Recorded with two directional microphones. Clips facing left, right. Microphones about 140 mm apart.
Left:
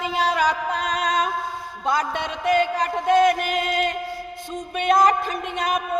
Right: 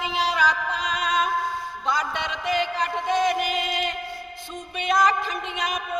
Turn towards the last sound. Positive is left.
turn(degrees=50)  # may be behind; listen again after turning